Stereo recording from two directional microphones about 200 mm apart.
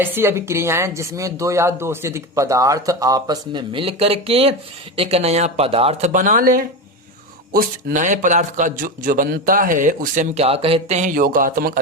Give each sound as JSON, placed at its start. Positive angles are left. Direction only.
{"t": 0.0, "sound": "a woman's voice", "side_deg": -10}